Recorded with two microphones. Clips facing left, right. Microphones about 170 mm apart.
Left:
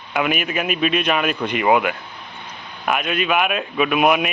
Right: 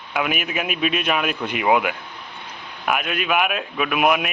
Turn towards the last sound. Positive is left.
turn(degrees=0)  # may be behind; listen again after turning